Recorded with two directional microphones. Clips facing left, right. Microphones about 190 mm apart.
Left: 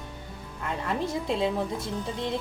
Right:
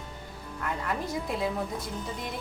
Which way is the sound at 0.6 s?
25° left (ahead or behind).